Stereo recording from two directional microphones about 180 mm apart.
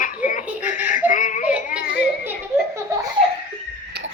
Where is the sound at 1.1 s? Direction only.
45° left (ahead or behind).